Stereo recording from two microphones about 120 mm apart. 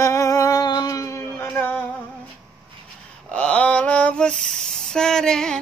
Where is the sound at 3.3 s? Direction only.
10° left (ahead or behind).